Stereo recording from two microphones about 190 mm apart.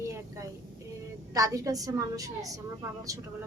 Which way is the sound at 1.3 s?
20° right (ahead or behind).